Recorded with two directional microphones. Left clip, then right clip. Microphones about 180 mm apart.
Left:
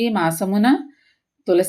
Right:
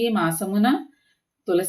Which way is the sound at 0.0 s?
40° left (ahead or behind).